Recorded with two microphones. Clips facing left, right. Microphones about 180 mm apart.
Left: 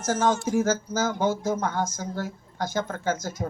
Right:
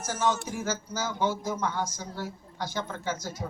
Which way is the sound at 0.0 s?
45° left (ahead or behind).